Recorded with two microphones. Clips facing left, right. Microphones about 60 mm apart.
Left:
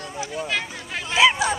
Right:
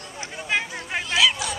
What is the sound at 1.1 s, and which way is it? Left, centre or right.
Chatter, left.